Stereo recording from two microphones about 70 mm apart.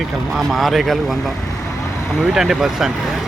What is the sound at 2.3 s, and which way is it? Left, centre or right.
Speech, centre.